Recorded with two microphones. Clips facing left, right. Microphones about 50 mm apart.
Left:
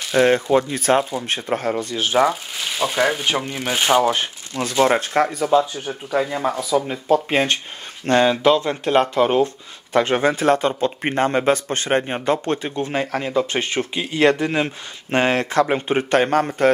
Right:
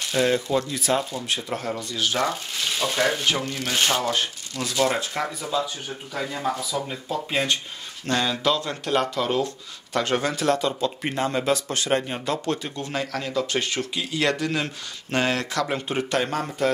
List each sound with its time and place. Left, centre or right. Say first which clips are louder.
0.1 s speech: left 7 dB; left
2.1 s speech: left 11 dB; centre
4.6 s speech: left 6 dB; left